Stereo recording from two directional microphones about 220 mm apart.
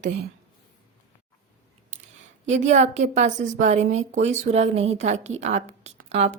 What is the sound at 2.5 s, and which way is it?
A woman's voice, 35° right (ahead or behind).